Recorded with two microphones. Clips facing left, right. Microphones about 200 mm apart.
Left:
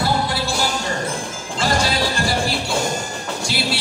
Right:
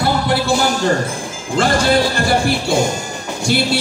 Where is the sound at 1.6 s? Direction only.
55° right (ahead or behind).